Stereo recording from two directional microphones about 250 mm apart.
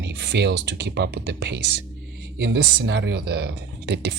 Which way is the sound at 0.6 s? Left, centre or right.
Right.